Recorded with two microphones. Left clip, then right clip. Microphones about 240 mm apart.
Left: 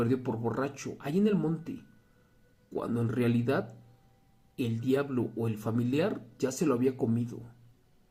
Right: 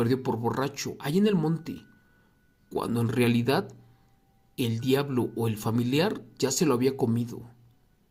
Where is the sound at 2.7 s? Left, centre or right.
Right.